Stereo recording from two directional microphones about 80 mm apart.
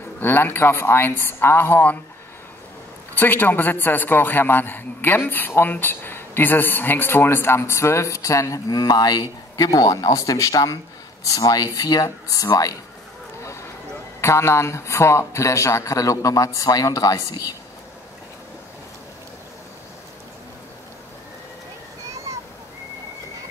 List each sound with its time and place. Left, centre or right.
0.2 s a man's voice: left
3.2 s a man's voice: left
13.4 s a sound: left
14.2 s a man's voice: left